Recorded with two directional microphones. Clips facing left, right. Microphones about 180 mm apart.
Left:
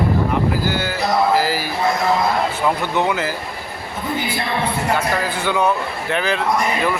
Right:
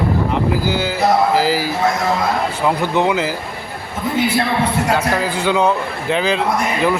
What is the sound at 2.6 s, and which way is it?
Speech, 15° right (ahead or behind).